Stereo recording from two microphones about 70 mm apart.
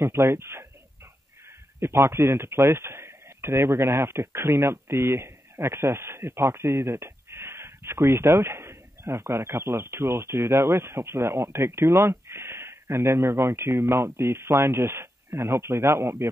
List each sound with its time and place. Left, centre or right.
0.0 s speech: right
1.8 s speech: right